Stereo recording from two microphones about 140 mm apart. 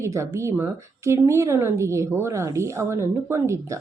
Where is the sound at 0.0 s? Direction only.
20° right (ahead or behind).